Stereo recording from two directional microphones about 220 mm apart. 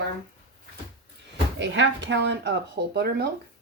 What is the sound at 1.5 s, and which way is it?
Speech, 55° right (ahead or behind).